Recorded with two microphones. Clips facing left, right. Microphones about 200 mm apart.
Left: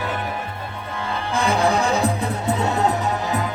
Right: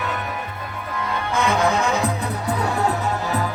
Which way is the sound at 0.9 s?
30° left (ahead or behind).